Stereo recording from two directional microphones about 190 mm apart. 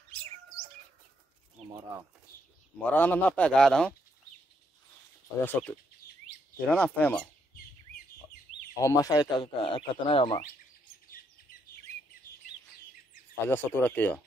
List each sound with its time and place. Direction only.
2.3 s a sound: 50° left (ahead or behind)
2.8 s speech: 10° left (ahead or behind)
5.4 s speech: 10° left (ahead or behind)
8.7 s speech: 20° left (ahead or behind)
13.5 s speech: 10° left (ahead or behind)